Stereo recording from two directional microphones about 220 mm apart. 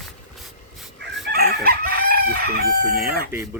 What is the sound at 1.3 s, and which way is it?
Crowing, 45° right (ahead or behind).